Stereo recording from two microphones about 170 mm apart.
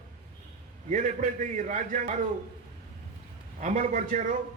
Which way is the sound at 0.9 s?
50° right (ahead or behind).